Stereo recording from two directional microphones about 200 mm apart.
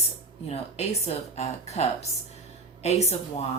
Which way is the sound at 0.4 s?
30° left (ahead or behind).